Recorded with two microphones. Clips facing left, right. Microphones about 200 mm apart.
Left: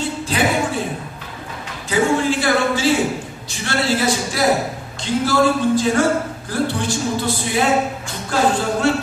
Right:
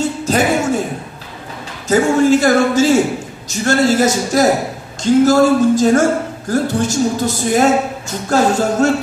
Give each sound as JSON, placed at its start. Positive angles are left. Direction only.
{"t": 0.0, "sound": "music", "side_deg": -45}
{"t": 1.9, "sound": "a man's voice", "side_deg": -45}